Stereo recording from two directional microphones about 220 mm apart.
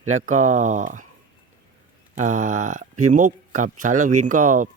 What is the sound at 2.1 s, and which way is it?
Speech, 35° right (ahead or behind).